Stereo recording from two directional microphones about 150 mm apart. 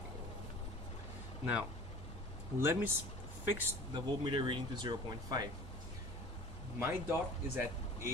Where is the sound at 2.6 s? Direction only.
15° right (ahead or behind).